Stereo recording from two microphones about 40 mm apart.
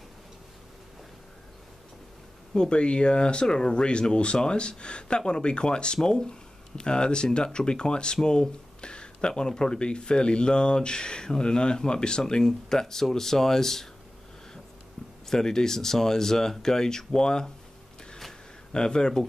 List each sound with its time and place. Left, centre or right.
2.5 s speech: left
15.2 s speech: centre
18.7 s speech: centre